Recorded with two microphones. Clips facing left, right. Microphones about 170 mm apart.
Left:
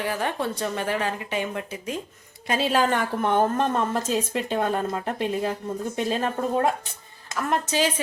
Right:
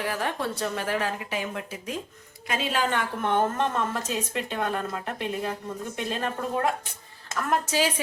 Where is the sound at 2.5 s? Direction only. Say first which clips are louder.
Left 5 dB; 35° left (ahead or behind).